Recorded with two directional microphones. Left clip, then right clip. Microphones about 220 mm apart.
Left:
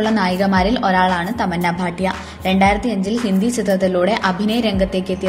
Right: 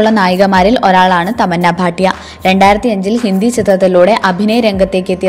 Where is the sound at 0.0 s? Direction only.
40° right (ahead or behind).